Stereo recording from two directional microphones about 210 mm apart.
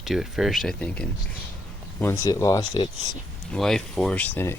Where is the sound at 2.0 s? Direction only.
15° left (ahead or behind).